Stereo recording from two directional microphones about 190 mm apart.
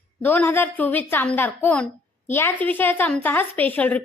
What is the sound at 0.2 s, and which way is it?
A woman's voice, 10° left (ahead or behind).